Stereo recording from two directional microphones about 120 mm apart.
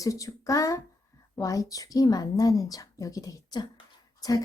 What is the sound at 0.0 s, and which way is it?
A woman's voice, 30° left (ahead or behind).